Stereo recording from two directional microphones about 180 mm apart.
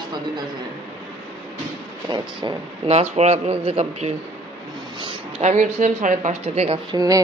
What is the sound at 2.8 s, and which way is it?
Speech, 40° right (ahead or behind).